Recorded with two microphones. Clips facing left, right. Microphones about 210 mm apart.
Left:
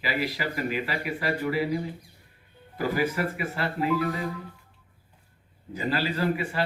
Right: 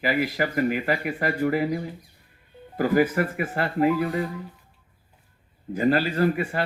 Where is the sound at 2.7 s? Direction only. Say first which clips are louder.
Right 6 dB; 50° right (ahead or behind).